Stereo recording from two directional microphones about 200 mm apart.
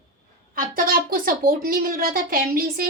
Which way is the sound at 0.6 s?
45° right (ahead or behind).